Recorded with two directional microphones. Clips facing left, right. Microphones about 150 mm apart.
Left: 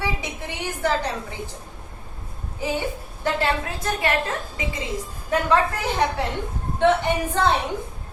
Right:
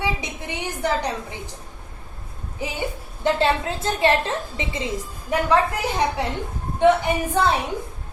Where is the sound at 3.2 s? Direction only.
25° right (ahead or behind).